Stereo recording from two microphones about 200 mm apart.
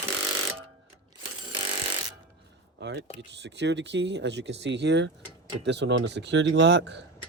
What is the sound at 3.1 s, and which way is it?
Speech, 60° right (ahead or behind).